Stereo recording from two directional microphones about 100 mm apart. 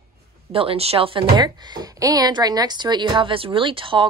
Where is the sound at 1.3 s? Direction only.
45° right (ahead or behind).